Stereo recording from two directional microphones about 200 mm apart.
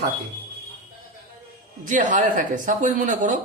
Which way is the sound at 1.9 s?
40° right (ahead or behind).